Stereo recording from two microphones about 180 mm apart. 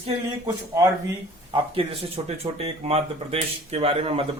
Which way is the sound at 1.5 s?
30° right (ahead or behind).